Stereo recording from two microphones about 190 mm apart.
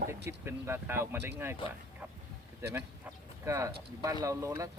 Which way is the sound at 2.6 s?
10° right (ahead or behind).